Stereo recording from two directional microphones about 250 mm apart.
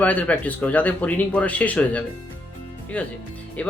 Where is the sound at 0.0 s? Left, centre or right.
Centre.